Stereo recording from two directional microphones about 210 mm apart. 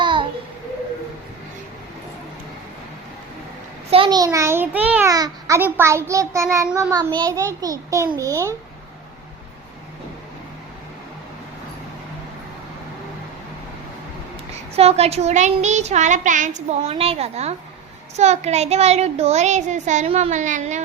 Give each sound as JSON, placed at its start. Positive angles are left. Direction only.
{"t": 0.0, "sound": "babbling", "side_deg": -25}
{"t": 3.9, "sound": "a child's voice", "side_deg": -20}
{"t": 14.8, "sound": "speech", "side_deg": -30}